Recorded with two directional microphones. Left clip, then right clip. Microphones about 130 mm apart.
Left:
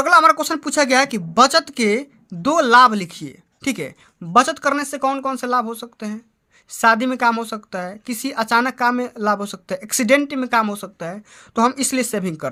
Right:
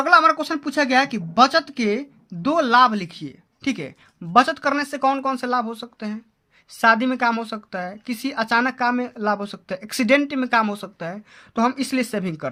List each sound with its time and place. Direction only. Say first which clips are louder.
0.0 s a woman's voice: left 2 dB; 45° left (ahead or behind); by 11.2 s 20° left (ahead or behind)
11.5 s a woman's voice: left 3 dB; 35° left (ahead or behind)